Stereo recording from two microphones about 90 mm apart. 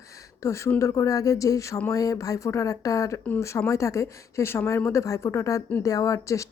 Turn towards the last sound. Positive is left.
turn(degrees=35)  # may be behind; listen again after turning